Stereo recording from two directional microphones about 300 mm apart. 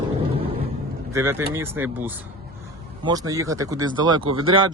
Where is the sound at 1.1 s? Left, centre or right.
Centre.